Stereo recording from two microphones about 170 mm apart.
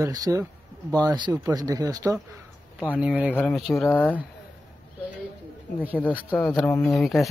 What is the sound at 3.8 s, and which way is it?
Speech, 10° left (ahead or behind).